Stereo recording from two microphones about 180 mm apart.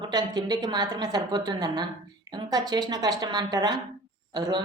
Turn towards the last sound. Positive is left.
turn(degrees=-25)  # may be behind; listen again after turning